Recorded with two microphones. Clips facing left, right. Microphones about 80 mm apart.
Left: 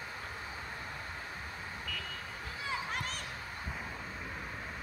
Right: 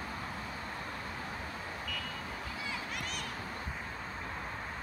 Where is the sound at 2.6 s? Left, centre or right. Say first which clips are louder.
Left 5 dB; left.